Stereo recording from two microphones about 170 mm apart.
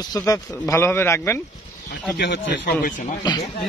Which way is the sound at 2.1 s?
90° left.